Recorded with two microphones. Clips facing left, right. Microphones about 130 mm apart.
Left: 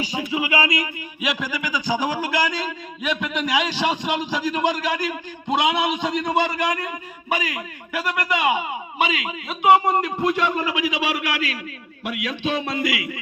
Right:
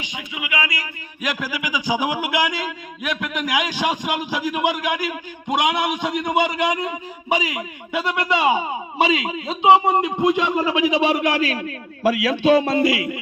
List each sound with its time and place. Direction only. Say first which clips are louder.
0.0 s a sound: left 7 dB; 35° left (ahead or behind)
1.2 s speech: even; centre (ahead or behind); by 11.5 s 30° right (ahead or behind)
12.5 s speech: right 7 dB; 30° right (ahead or behind)